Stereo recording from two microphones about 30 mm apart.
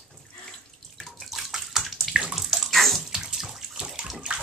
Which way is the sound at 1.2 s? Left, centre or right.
Centre.